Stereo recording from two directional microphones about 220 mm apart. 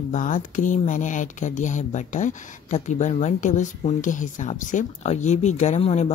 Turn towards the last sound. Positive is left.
turn(degrees=30)  # may be behind; listen again after turning